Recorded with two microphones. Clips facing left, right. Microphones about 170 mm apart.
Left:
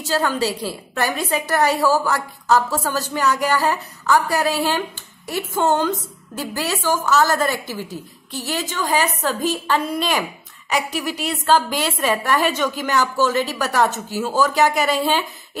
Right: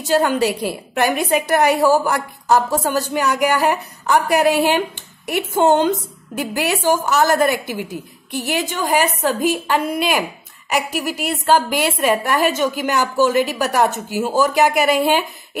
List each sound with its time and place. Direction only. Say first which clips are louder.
0.1 s a woman's voice: right 5 dB; 20° right (ahead or behind)